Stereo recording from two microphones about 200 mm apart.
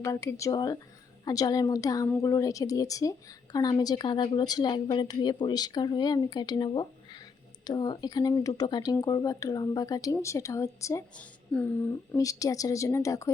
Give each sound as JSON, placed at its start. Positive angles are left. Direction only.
{"t": 0.0, "sound": "a woman's voice", "side_deg": 15}